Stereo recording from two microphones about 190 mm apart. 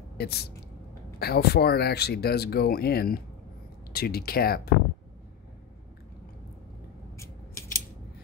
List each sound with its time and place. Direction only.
0.2 s speech: 60° left (ahead or behind)
7.2 s scissors: 15° left (ahead or behind)